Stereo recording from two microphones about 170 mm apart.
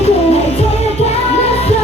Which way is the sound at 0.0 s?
35° left (ahead or behind).